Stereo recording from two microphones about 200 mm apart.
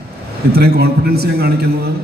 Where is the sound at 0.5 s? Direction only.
50° right (ahead or behind).